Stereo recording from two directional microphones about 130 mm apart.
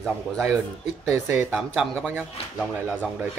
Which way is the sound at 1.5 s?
5° right (ahead or behind).